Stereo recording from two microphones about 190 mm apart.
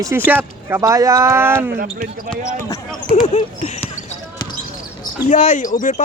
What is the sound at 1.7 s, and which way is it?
Speech, 50° right (ahead or behind).